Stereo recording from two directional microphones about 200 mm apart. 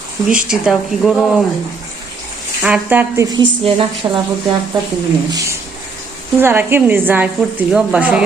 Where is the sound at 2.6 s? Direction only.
5° right (ahead or behind); by 4.2 s 25° right (ahead or behind).